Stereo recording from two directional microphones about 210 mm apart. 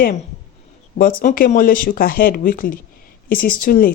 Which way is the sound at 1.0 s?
45° left (ahead or behind).